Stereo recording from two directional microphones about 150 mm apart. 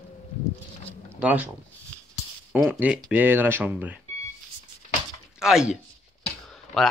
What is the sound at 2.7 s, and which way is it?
Speech, 10° right (ahead or behind).